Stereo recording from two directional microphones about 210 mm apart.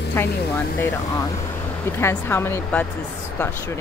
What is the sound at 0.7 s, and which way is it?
Speech, 15° left (ahead or behind).